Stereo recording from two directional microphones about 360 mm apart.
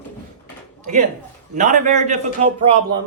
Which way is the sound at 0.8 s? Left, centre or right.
Right.